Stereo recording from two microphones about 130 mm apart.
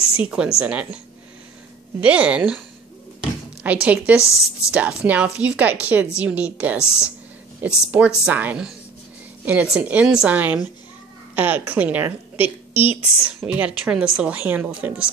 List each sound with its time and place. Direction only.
0.2 s a woman's voice: 10° right (ahead or behind)
2.0 s a woman's voice: 10° right (ahead or behind)
3.8 s a woman's voice: 10° right (ahead or behind)
4.2 s a woman's voice: 20° left (ahead or behind)
4.6 s a woman's voice: 10° right (ahead or behind)